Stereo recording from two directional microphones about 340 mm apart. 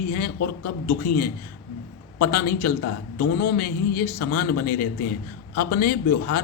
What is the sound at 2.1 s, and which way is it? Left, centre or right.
A man's voice, left.